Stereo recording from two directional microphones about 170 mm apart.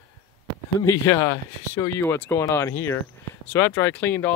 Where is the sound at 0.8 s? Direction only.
20° left (ahead or behind).